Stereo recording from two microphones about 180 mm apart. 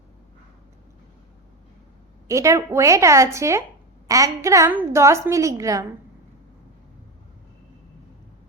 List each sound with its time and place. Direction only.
2.2 s a woman's voice: 15° right (ahead or behind)